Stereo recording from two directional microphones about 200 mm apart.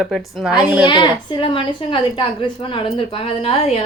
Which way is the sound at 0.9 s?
20° left (ahead or behind).